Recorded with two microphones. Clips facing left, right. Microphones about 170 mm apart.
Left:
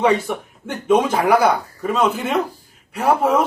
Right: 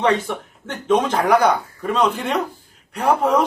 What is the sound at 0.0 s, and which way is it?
Speech, 10° left (ahead or behind).